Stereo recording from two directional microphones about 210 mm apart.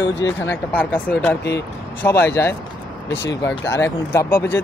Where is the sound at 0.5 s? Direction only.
10° left (ahead or behind).